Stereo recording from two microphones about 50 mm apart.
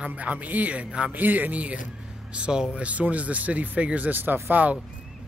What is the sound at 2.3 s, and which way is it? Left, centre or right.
Speech, centre.